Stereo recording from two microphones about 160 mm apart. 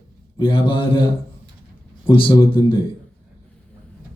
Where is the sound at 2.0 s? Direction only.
35° left (ahead or behind).